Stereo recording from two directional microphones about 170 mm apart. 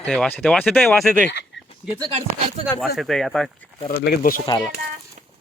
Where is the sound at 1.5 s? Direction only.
90° left.